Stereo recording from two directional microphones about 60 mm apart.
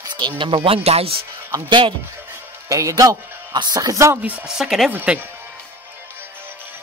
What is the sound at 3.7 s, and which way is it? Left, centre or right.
Speech, right.